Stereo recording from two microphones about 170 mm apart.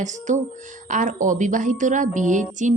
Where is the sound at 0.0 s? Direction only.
45° right (ahead or behind).